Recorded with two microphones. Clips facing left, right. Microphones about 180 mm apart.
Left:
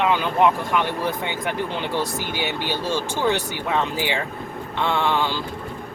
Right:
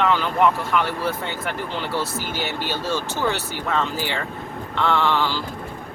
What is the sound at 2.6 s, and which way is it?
Speech, 15° left (ahead or behind).